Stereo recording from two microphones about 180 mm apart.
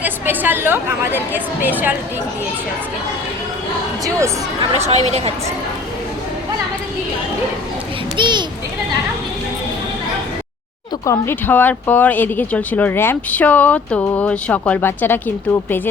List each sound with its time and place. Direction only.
0.0 s a woman's voice: 10° right (ahead or behind)
4.8 s speech: 40° right (ahead or behind)
8.1 s a sound: 25° right (ahead or behind)
11.0 s speech: 15° left (ahead or behind)